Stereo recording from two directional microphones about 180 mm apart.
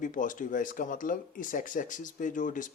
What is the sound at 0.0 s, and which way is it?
Speech, 45° left (ahead or behind).